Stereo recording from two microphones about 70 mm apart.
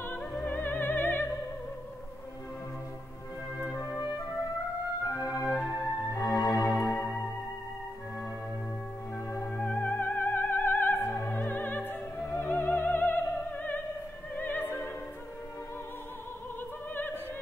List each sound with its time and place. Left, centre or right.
0.0 s music: left
5.0 s music: left
6.3 s music: left
6.9 s music: left
9.4 s music: left
11.1 s opera: left
12.3 s music: left
14.3 s opera: left
16.9 s opera: left